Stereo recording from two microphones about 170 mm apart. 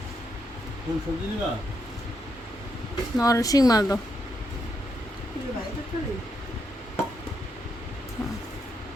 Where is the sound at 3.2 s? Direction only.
20° left (ahead or behind).